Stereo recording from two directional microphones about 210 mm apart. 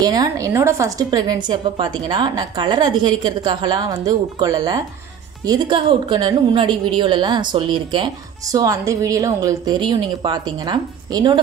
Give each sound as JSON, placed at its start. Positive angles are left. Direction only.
{"t": 0.0, "sound": "a woman's voice", "side_deg": -15}